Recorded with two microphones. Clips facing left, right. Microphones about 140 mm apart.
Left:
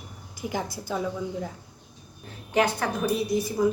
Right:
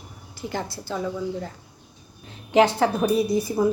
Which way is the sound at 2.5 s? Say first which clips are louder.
Right 6 dB; 25° right (ahead or behind).